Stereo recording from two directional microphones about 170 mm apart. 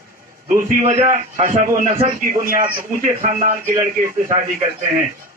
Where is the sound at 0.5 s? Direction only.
50° right (ahead or behind).